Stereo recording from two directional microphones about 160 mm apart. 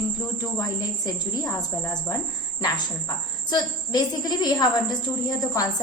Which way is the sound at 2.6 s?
25° left (ahead or behind).